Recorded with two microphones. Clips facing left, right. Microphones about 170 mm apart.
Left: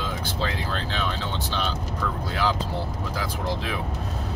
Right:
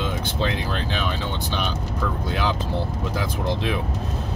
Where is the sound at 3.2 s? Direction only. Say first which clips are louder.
Right 3 dB; 20° right (ahead or behind).